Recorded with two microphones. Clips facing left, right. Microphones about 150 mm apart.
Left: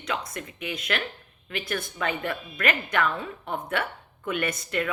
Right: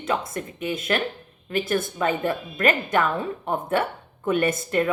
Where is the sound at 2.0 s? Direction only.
35° right (ahead or behind).